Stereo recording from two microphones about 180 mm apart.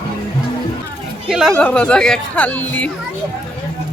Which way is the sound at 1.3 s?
5° right (ahead or behind).